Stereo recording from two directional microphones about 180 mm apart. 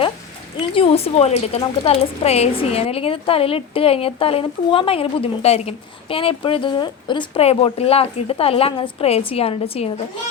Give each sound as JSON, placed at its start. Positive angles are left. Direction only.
{"t": 0.7, "sound": "a woman's voice", "side_deg": 30}